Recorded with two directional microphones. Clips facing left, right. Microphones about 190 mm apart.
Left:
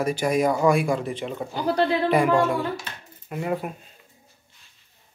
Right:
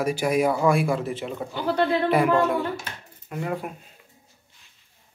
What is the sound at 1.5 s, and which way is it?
Speech, 40° left (ahead or behind).